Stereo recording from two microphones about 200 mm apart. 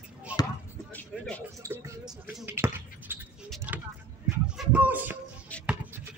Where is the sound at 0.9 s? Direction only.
5° left (ahead or behind).